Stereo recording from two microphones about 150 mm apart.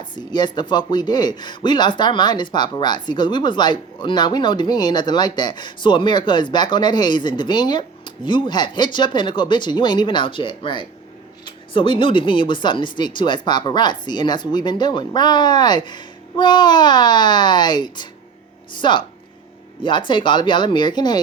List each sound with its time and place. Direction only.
0.0 s speech: 30° left (ahead or behind)